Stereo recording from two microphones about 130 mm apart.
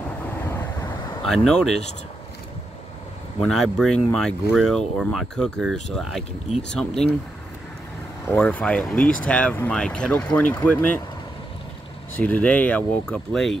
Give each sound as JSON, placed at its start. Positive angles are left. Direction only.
{"t": 0.4, "sound": "vehicle", "side_deg": 15}
{"t": 1.2, "sound": "speech", "side_deg": 5}
{"t": 3.3, "sound": "speech", "side_deg": 5}
{"t": 8.3, "sound": "speech", "side_deg": 15}
{"t": 12.2, "sound": "speech", "side_deg": 10}